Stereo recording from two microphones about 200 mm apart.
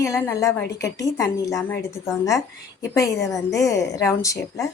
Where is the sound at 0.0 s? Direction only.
15° left (ahead or behind).